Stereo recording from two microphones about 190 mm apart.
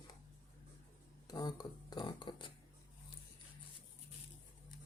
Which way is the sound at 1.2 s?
20° left (ahead or behind).